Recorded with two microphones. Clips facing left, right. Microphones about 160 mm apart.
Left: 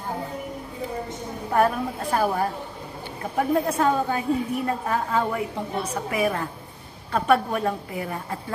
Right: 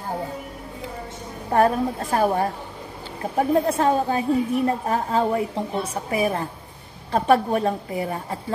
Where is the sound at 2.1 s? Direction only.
30° right (ahead or behind).